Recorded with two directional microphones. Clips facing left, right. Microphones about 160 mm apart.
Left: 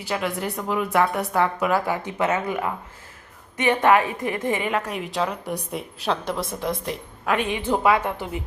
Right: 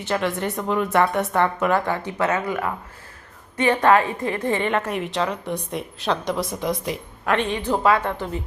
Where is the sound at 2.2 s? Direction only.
20° left (ahead or behind).